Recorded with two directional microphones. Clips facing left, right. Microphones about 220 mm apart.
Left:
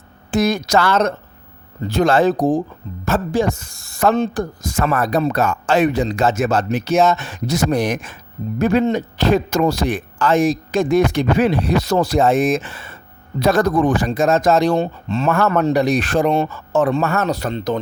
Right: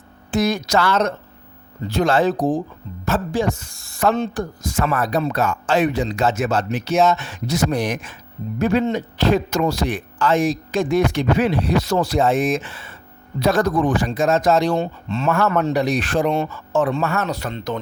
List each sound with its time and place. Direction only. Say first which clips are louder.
0.3 s speech: left 2 dB; 45° left (ahead or behind)